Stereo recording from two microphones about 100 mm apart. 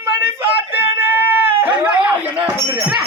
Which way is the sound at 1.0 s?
20° right (ahead or behind).